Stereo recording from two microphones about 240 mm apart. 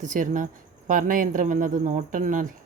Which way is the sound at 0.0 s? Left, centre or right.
Right.